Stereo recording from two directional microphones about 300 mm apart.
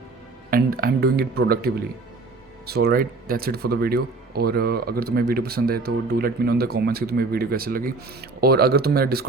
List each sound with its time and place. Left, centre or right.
0.5 s speech: right